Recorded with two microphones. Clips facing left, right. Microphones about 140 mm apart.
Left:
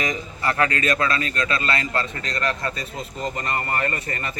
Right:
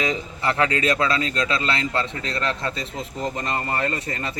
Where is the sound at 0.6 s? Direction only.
15° right (ahead or behind).